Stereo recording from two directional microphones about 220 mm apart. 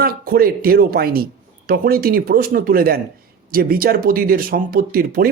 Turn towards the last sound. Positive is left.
turn(degrees=-40)  # may be behind; listen again after turning